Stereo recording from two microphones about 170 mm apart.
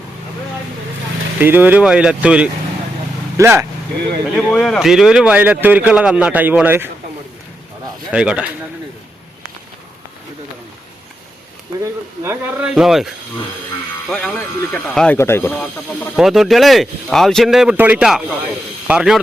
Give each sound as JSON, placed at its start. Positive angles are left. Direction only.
{"t": 1.4, "sound": "a man's voice", "side_deg": -10}
{"t": 4.4, "sound": "a man's voice", "side_deg": 0}
{"t": 8.1, "sound": "speech", "side_deg": -5}
{"t": 11.8, "sound": "speech", "side_deg": -15}
{"t": 14.1, "sound": "speech", "side_deg": 5}
{"t": 16.1, "sound": "speech", "side_deg": 0}